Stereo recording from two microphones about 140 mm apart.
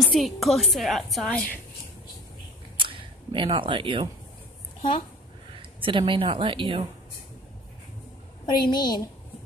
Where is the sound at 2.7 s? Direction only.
35° right (ahead or behind).